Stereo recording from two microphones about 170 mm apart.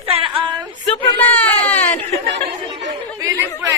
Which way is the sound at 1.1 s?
10° left (ahead or behind).